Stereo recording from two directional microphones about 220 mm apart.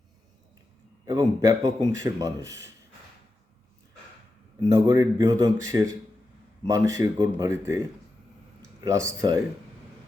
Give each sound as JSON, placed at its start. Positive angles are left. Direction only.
{"t": 1.0, "sound": "speech", "side_deg": -15}
{"t": 4.7, "sound": "speech", "side_deg": -15}
{"t": 8.8, "sound": "speech", "side_deg": -15}